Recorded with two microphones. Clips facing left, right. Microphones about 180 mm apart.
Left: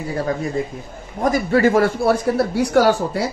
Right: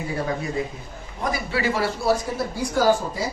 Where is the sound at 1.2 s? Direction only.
45° left (ahead or behind); by 3.3 s 70° left (ahead or behind).